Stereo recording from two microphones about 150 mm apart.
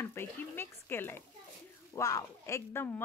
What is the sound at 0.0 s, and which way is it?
Stir, 15° left (ahead or behind).